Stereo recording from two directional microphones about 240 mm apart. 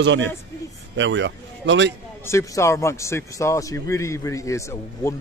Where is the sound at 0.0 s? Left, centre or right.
Right.